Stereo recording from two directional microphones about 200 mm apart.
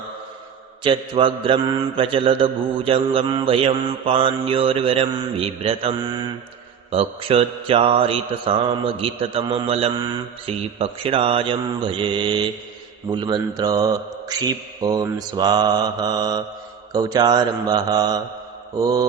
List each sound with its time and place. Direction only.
0.9 s mantra: 25° right (ahead or behind)